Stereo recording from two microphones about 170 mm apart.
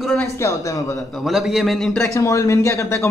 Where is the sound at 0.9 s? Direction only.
Centre (ahead or behind).